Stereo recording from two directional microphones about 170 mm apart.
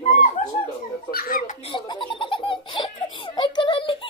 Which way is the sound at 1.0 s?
60° left (ahead or behind).